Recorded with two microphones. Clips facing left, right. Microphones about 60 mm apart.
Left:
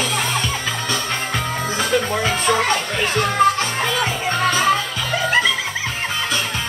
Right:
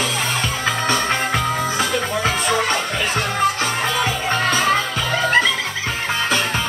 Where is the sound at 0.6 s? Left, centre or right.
Right.